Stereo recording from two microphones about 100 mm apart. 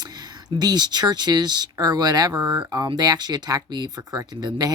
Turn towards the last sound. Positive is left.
turn(degrees=-40)  # may be behind; listen again after turning